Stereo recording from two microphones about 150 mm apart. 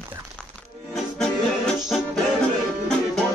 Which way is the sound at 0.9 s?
Centre (ahead or behind).